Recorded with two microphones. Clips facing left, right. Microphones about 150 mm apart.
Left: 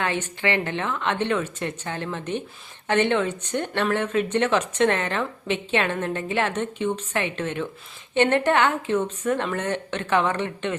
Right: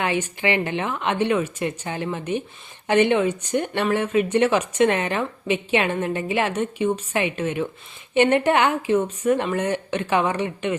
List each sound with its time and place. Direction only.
0.0 s speech: 15° right (ahead or behind)